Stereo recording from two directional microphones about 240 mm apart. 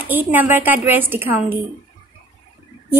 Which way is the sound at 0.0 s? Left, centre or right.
Centre.